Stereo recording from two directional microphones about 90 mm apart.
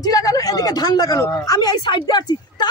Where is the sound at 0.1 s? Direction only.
45° left (ahead or behind).